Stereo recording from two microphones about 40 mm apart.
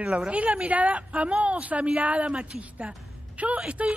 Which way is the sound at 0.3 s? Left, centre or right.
Right.